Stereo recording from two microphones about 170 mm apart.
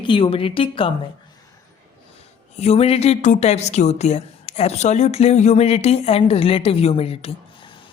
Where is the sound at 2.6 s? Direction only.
35° left (ahead or behind).